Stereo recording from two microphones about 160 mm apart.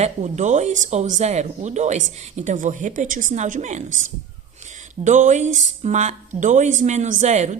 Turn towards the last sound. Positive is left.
turn(degrees=-45)  # may be behind; listen again after turning